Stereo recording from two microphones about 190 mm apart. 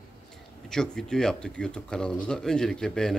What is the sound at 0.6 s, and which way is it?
A man's voice, 5° left (ahead or behind).